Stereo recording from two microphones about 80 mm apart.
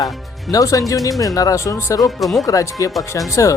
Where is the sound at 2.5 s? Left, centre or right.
Left.